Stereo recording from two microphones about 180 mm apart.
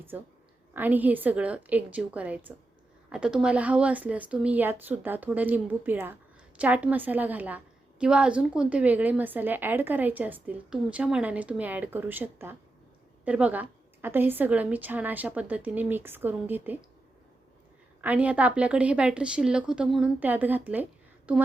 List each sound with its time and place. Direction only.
0.7 s a woman's voice: 10° right (ahead or behind)
18.0 s a woman's voice: 10° right (ahead or behind)